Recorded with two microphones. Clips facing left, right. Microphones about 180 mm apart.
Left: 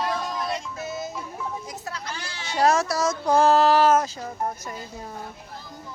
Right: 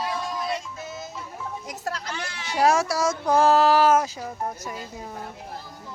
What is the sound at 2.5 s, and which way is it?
Speech, 10° right (ahead or behind).